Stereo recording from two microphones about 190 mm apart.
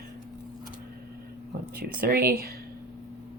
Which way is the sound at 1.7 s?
50° right (ahead or behind).